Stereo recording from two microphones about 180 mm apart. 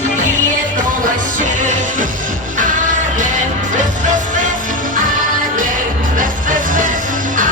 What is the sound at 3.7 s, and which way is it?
Music, 45° right (ahead or behind).